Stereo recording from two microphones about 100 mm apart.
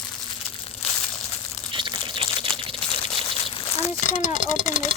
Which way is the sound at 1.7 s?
55° right (ahead or behind).